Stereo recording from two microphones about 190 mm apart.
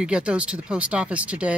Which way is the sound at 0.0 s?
5° right (ahead or behind).